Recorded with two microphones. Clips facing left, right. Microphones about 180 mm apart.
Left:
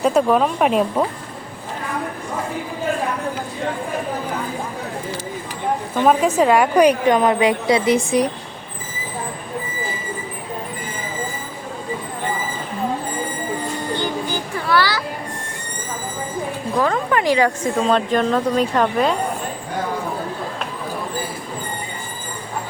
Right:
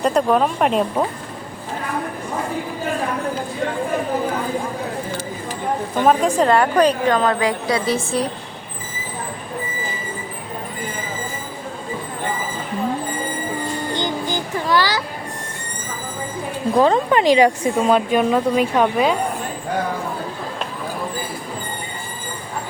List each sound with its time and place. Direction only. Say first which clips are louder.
0.0 s speech: left 1 dB; 5° left (ahead or behind)
6.1 s a woman's voice: left 1 dB; 5° left (ahead or behind)
14.0 s music: even; 20° right (ahead or behind)
16.7 s speech: right 4 dB; 25° right (ahead or behind); by 19.1 s 5° right (ahead or behind)